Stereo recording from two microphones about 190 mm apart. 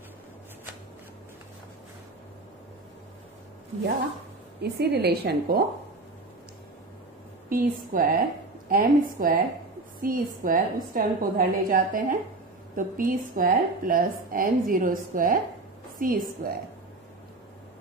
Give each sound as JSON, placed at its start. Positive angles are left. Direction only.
{"t": 4.6, "sound": "a woman's voice", "side_deg": -55}
{"t": 7.4, "sound": "a woman's voice", "side_deg": -50}